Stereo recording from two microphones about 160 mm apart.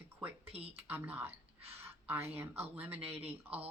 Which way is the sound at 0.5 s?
40° right (ahead or behind).